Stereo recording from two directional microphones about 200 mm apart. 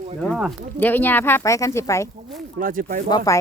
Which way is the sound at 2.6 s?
45° right (ahead or behind).